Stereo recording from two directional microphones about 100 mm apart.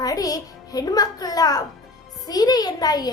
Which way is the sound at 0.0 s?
35° left (ahead or behind).